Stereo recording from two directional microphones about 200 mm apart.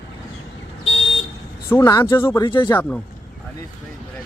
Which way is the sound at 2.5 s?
25° left (ahead or behind).